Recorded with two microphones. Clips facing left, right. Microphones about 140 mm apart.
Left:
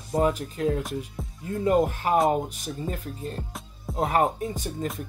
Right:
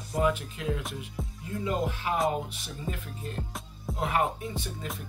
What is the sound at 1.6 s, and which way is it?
Speech, 50° left (ahead or behind).